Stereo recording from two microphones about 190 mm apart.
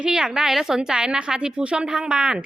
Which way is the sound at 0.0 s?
5° right (ahead or behind).